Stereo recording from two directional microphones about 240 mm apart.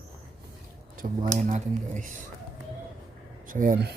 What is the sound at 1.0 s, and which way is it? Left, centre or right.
Speech, right.